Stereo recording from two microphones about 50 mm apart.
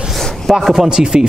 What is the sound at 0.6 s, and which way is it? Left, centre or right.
Speech, centre.